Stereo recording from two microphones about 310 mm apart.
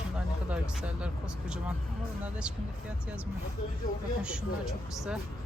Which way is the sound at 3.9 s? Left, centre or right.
Left.